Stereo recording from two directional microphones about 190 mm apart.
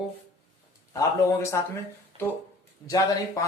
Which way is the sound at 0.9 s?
15° left (ahead or behind).